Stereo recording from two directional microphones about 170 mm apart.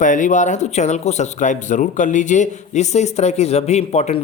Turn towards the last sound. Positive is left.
turn(degrees=40)  # may be behind; listen again after turning